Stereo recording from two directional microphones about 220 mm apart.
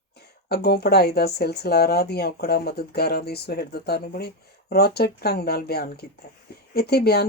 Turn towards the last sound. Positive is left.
turn(degrees=45)  # may be behind; listen again after turning